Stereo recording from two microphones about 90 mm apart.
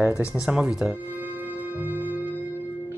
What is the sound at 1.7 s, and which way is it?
Music, 20° right (ahead or behind).